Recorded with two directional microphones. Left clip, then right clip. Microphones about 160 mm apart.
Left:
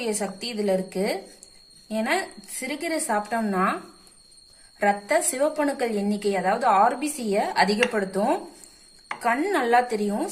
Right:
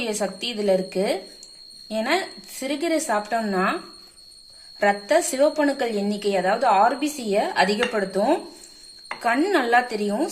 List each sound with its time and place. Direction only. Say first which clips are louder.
0.0 s a woman's voice: right 3 dB; 25° right (ahead or behind)
4.8 s a woman's voice: right 2 dB; 20° right (ahead or behind)